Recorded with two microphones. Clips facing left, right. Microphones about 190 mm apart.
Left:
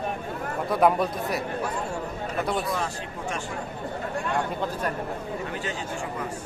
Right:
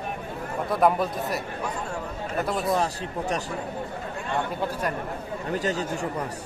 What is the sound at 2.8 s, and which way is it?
Speech, 35° right (ahead or behind).